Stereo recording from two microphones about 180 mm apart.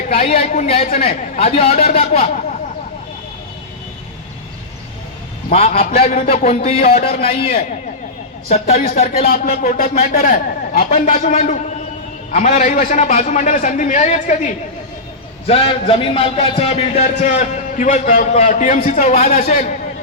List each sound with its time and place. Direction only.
0.1 s a man's voice: 35° left (ahead or behind)
5.5 s a man's voice: 35° left (ahead or behind)
9.3 s a man's voice: 50° left (ahead or behind)